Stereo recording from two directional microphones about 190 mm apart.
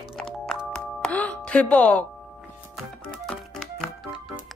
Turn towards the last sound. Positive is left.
turn(degrees=0)  # may be behind; listen again after turning